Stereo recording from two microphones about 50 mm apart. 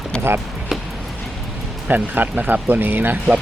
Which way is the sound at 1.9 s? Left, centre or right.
Right.